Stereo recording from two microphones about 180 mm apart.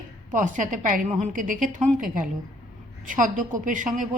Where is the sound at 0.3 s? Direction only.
45° right (ahead or behind).